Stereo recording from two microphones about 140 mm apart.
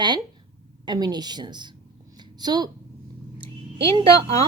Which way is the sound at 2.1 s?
30° right (ahead or behind).